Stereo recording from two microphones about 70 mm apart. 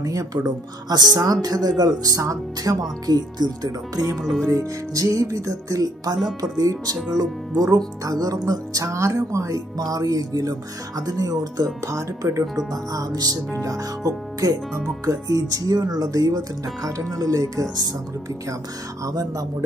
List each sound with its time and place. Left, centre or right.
0.0 s music: right
3.1 s music: right
4.2 s music: centre
4.5 s music: right
13.5 s music: right
19.0 s music: right